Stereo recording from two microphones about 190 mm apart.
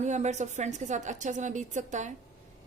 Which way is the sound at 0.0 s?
40° right (ahead or behind).